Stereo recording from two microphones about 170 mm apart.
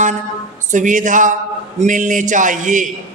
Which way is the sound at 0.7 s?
50° right (ahead or behind).